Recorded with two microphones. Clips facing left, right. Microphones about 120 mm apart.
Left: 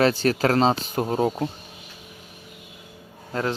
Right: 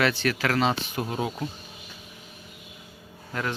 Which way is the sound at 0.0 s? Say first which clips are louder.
Left 5 dB; 35° left (ahead or behind).